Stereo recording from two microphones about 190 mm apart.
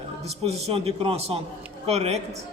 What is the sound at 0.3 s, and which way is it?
A man's voice, 35° right (ahead or behind).